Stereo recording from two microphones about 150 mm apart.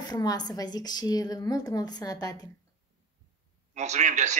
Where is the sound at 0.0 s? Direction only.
25° left (ahead or behind).